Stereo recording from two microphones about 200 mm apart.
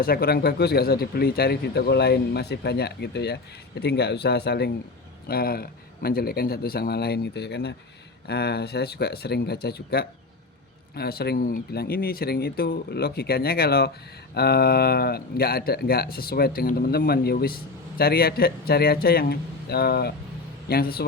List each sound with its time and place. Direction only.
0.0 s speech: 50° left (ahead or behind)